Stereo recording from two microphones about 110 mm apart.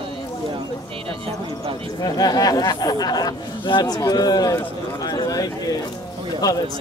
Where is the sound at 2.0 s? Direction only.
40° left (ahead or behind).